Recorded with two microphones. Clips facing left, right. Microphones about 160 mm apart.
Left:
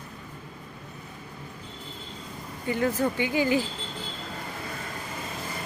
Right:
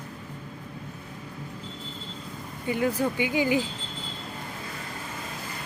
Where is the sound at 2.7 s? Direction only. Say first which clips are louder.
Even; 15° right (ahead or behind).